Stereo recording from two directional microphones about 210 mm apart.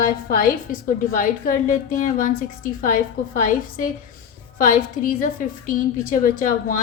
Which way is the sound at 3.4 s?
40° left (ahead or behind).